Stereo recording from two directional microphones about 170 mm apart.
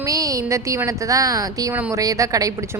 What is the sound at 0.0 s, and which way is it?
A woman's voice, 20° right (ahead or behind).